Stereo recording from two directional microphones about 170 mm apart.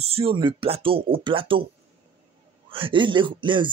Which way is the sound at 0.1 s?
30° right (ahead or behind).